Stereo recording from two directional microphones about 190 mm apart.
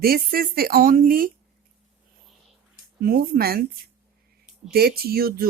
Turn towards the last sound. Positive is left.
turn(degrees=-55)  # may be behind; listen again after turning